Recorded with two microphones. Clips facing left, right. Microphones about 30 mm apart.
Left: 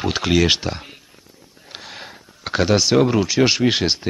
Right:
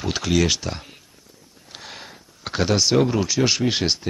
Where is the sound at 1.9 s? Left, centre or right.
Centre.